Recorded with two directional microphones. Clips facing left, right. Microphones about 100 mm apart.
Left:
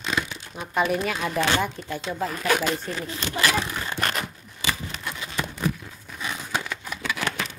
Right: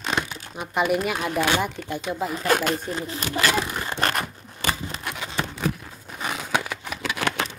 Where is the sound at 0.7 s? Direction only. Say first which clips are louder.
Right 1 dB; 10° right (ahead or behind).